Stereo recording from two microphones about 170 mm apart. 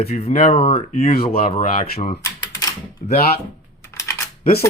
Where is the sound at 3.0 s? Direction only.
45° left (ahead or behind).